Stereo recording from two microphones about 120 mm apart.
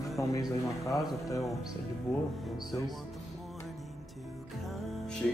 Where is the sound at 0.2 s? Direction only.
25° left (ahead or behind).